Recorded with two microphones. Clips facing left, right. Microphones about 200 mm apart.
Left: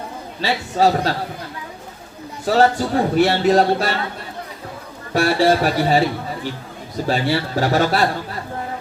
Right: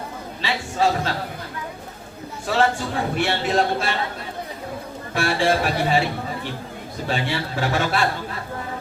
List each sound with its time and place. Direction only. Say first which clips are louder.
0.4 s a man's voice: left 5 dB; 40° left (ahead or behind)
2.5 s a man's voice: left 5 dB; 40° left (ahead or behind)
5.1 s a man's voice: left 5 dB; 40° left (ahead or behind)
7.1 s a man's voice: left 5 dB; 40° left (ahead or behind)